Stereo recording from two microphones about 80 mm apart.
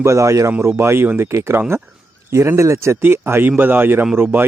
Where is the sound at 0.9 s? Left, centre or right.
Right.